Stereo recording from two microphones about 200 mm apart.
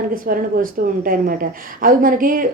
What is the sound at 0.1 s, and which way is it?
A woman's voice, 45° right (ahead or behind).